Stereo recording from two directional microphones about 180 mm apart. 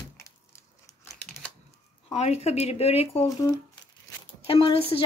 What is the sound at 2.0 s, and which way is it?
Speech, 35° left (ahead or behind).